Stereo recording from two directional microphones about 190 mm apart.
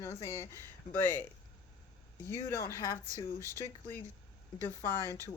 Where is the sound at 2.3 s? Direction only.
15° left (ahead or behind).